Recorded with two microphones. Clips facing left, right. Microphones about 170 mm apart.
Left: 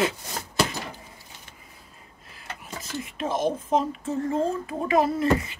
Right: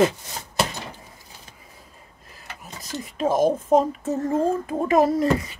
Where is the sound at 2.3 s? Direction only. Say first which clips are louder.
Left 2 dB; 40° right (ahead or behind).